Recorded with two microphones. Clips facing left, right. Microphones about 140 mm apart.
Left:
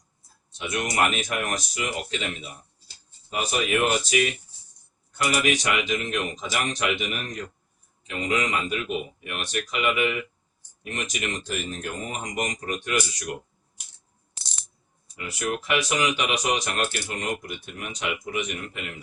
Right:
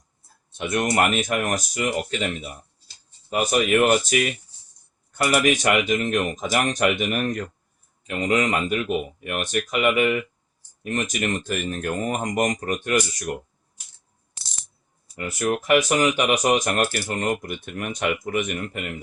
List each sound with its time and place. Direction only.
0.5 s speech: 50° right (ahead or behind)
3.2 s speech: 50° right (ahead or behind)
15.1 s speech: 45° right (ahead or behind)